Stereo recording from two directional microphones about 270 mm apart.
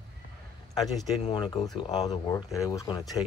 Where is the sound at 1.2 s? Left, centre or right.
Centre.